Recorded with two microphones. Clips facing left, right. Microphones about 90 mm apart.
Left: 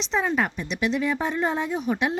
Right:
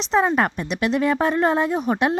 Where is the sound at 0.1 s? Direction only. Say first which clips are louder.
Right 6 dB; 50° right (ahead or behind).